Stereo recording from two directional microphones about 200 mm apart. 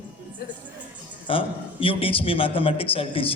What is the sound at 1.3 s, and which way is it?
A man's voice, 25° left (ahead or behind).